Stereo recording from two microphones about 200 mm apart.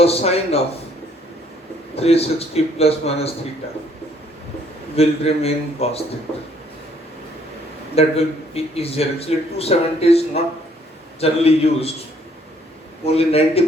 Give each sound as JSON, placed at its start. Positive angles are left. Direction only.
{"t": 0.0, "sound": "speech", "side_deg": 30}
{"t": 2.0, "sound": "a man's voice", "side_deg": 30}
{"t": 4.9, "sound": "a man's voice", "side_deg": 30}
{"t": 7.9, "sound": "a man's voice", "side_deg": 30}
{"t": 13.1, "sound": "speech", "side_deg": 30}